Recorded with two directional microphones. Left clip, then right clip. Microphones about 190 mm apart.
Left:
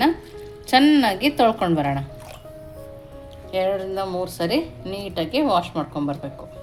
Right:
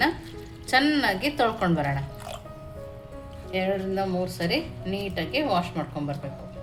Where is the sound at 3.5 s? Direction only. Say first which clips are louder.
Left 4 dB; 40° left (ahead or behind).